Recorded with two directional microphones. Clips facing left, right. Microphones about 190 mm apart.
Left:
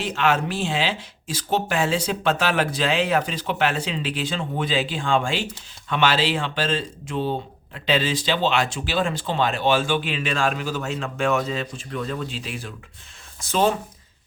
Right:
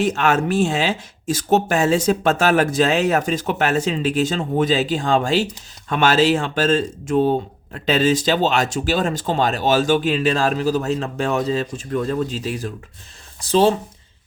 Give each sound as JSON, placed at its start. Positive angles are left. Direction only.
{"t": 0.0, "sound": "speech", "side_deg": -45}